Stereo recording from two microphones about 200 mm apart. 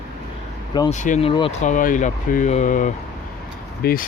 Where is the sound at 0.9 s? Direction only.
35° left (ahead or behind).